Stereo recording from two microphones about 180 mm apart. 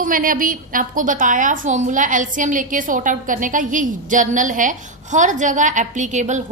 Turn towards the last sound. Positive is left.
turn(degrees=-40)  # may be behind; listen again after turning